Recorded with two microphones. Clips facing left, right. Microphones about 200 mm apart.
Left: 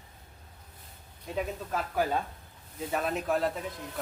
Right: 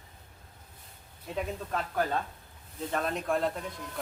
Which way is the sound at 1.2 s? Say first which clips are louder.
Left 1 dB; centre (ahead or behind).